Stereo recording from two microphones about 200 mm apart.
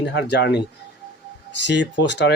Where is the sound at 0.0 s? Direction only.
60° left (ahead or behind).